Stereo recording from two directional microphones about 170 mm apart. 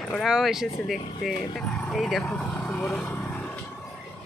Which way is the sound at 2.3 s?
15° left (ahead or behind).